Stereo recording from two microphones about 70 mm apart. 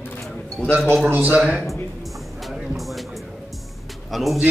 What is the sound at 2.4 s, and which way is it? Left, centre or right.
Music, centre.